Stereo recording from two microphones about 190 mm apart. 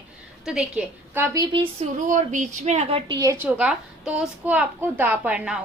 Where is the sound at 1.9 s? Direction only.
40° right (ahead or behind).